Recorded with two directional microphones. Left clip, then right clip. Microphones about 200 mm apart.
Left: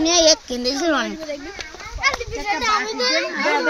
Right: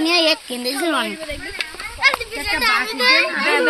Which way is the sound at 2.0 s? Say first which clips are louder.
Right 3 dB; 50° left (ahead or behind).